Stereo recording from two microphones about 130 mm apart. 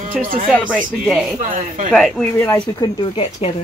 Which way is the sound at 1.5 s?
70° right (ahead or behind).